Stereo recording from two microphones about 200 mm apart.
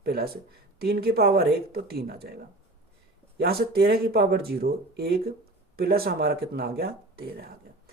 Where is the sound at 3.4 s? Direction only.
50° right (ahead or behind).